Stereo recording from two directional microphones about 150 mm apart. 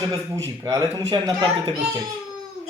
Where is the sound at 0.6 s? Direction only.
20° right (ahead or behind).